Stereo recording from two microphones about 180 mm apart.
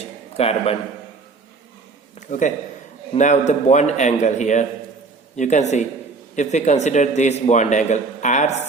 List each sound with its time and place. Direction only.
0.3 s a man's voice: 35° left (ahead or behind)
2.1 s a man's voice: 45° left (ahead or behind)